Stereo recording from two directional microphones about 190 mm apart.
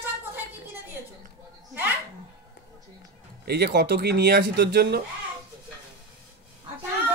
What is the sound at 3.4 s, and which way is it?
Speech, 60° right (ahead or behind).